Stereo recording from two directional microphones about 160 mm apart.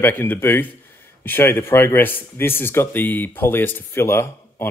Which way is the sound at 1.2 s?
15° left (ahead or behind).